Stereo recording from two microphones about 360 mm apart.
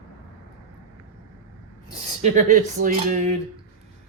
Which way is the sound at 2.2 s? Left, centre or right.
Right.